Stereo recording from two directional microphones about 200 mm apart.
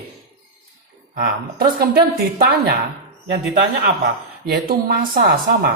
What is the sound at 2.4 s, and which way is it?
Speech, 55° right (ahead or behind).